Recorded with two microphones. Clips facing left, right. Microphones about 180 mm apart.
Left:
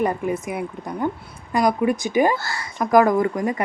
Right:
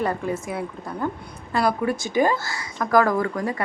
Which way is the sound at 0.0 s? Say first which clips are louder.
Left 3 dB; 15° left (ahead or behind).